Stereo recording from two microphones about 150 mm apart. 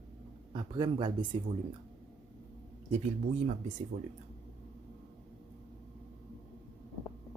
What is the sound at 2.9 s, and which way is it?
Speech, 50° right (ahead or behind).